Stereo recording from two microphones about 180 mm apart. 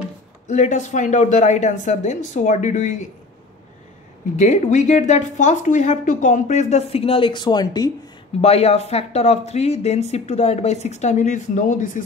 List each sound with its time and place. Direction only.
0.5 s speech: 40° left (ahead or behind)
4.4 s speech: 40° left (ahead or behind); by 7.9 s 20° left (ahead or behind)
8.4 s speech: 35° left (ahead or behind)